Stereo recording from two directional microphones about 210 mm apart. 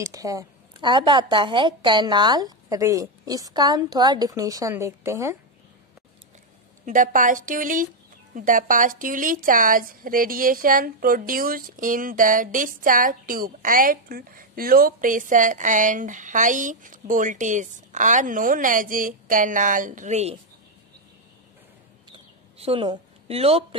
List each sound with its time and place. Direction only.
0.0 s a woman's voice: 15° right (ahead or behind)
6.9 s a woman's voice: 40° right (ahead or behind)
22.1 s a sound: 25° right (ahead or behind)